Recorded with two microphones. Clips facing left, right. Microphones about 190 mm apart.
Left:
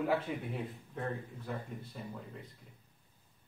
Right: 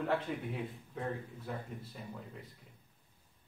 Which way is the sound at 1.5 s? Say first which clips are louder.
Left 1 dB; centre (ahead or behind).